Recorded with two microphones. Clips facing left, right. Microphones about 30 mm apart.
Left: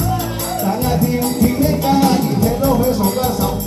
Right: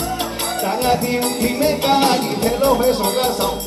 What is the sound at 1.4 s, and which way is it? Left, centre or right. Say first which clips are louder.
Music: left 1 dB; right.